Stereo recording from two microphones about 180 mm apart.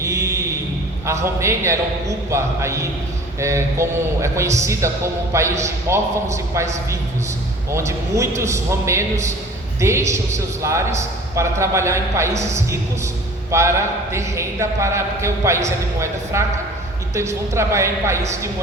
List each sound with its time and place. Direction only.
0.0 s a sound: 15° right (ahead or behind)
1.0 s a man's voice: 15° right (ahead or behind)
7.7 s a man's voice: 15° right (ahead or behind)
13.5 s a man's voice: 15° right (ahead or behind)